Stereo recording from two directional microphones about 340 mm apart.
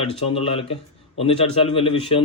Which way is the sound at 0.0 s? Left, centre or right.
Centre.